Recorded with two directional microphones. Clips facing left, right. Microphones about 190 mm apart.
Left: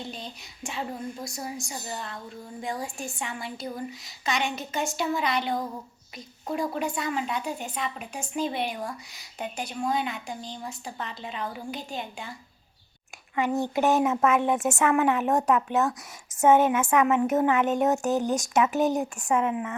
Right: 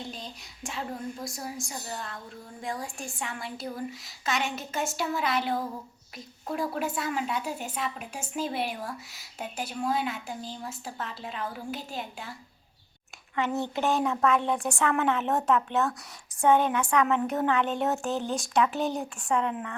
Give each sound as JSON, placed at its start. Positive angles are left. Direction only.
{"t": 0.0, "sound": "a woman's voice", "side_deg": 0}
{"t": 13.3, "sound": "speech", "side_deg": 15}
{"t": 15.4, "sound": "a woman's voice", "side_deg": 0}
{"t": 15.9, "sound": "speech", "side_deg": 20}
{"t": 17.1, "sound": "speech", "side_deg": 5}
{"t": 17.3, "sound": "speech", "side_deg": 15}
{"t": 19.4, "sound": "a woman's voice", "side_deg": 5}